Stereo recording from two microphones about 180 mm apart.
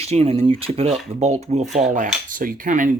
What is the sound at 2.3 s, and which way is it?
Speech, 50° right (ahead or behind).